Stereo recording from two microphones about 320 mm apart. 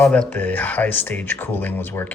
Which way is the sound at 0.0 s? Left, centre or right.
Centre.